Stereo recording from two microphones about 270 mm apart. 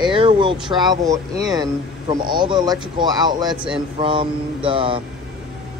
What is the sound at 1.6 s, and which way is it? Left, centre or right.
A man's voice, centre.